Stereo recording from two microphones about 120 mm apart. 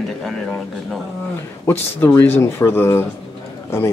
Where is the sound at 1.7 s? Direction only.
15° left (ahead or behind).